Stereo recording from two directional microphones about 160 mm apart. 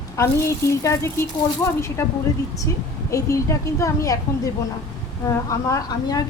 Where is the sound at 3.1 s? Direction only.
20° left (ahead or behind).